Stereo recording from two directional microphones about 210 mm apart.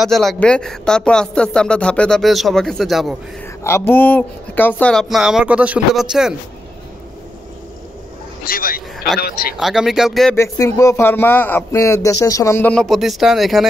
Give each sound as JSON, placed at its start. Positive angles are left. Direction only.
{"t": 0.0, "sound": "speech", "side_deg": 0}
{"t": 3.6, "sound": "speech", "side_deg": 10}
{"t": 8.5, "sound": "a man's voice", "side_deg": 45}
{"t": 9.6, "sound": "speech", "side_deg": 0}
{"t": 10.3, "sound": "speech", "side_deg": 15}